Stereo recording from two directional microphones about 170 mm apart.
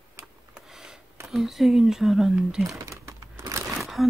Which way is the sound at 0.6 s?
5° right (ahead or behind).